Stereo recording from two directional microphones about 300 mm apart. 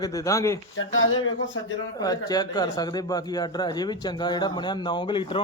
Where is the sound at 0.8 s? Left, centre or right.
Left.